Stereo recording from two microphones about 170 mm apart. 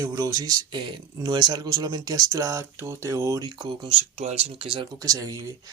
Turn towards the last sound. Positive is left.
turn(degrees=-20)  # may be behind; listen again after turning